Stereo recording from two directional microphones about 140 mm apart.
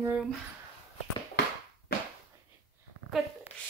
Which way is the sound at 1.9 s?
90° left.